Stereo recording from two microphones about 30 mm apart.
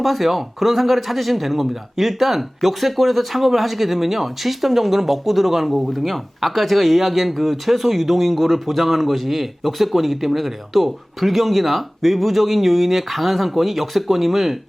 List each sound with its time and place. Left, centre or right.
0.0 s speech: centre